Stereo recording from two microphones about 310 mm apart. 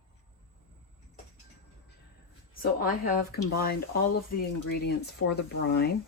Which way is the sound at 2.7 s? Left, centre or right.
Left.